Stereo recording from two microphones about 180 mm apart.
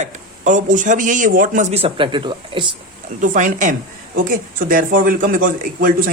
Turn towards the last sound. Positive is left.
turn(degrees=-50)  # may be behind; listen again after turning